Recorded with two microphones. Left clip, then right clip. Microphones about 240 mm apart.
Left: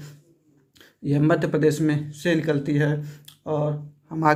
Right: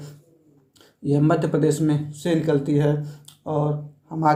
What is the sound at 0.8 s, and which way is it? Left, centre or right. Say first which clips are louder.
A man's voice: right 2 dB; left.